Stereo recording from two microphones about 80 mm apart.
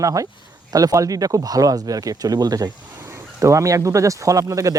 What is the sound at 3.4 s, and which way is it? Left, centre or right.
Speech, right.